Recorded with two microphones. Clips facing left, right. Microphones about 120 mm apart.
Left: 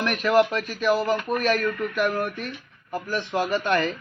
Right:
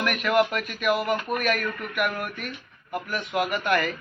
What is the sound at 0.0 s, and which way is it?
Speech, 30° left (ahead or behind).